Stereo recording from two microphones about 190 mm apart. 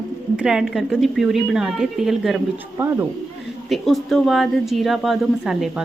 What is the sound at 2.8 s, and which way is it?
Speech, 10° right (ahead or behind).